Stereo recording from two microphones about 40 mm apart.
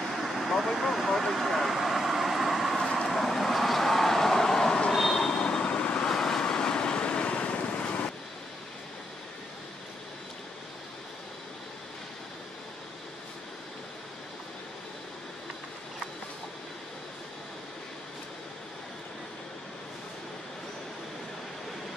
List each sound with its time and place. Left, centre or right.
0.0 s vehicle: centre
2.8 s vehicle: centre
3.1 s vehicle: centre; by 6.0 s left
6.0 s vehicle: centre; by 8.1 s left